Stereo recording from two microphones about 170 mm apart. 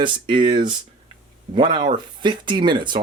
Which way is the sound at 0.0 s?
30° right (ahead or behind).